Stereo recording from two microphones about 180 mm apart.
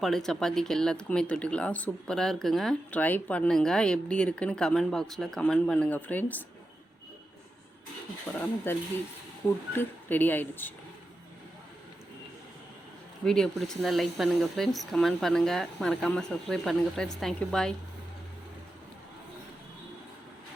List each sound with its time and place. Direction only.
0.0 s speech: centre (ahead or behind)
8.3 s speech: 10° left (ahead or behind)
13.2 s speech: 5° left (ahead or behind)